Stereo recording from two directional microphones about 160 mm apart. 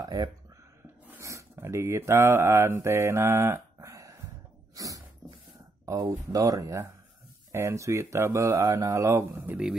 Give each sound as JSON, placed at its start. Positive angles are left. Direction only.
{"t": 0.0, "sound": "speech", "side_deg": -25}
{"t": 4.7, "sound": "a sound", "side_deg": -20}
{"t": 5.9, "sound": "speech", "side_deg": -20}